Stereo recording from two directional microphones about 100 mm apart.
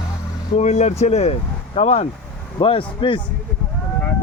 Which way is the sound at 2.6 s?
65° left (ahead or behind).